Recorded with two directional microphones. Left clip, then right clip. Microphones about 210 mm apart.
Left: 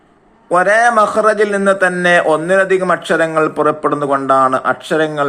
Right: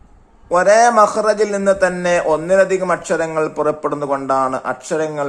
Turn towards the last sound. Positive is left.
turn(degrees=-15)  # may be behind; listen again after turning